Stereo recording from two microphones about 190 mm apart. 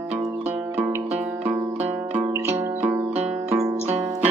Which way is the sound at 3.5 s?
15° right (ahead or behind).